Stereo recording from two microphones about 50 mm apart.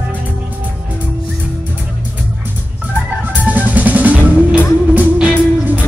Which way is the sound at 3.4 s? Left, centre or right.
Right.